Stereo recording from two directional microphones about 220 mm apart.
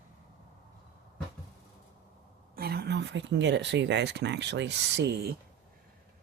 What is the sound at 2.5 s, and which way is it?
Speech, 45° right (ahead or behind).